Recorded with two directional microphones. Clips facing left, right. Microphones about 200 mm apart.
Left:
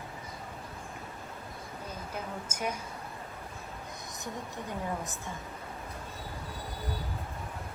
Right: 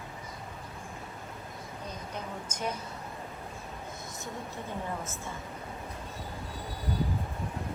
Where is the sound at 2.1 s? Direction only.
10° left (ahead or behind).